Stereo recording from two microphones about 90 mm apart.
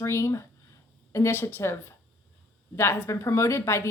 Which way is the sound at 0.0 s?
30° left (ahead or behind).